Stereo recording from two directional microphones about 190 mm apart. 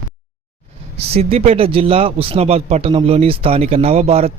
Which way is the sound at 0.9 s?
30° right (ahead or behind).